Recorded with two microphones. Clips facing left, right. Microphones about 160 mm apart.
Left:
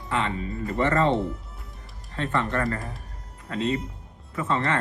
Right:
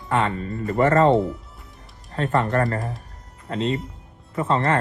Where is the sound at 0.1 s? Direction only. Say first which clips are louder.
Right 5 dB; 40° right (ahead or behind).